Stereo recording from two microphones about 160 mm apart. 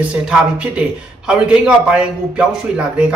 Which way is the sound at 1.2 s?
5° right (ahead or behind).